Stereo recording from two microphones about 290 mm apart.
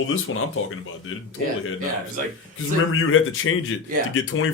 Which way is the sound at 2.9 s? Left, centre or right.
Left.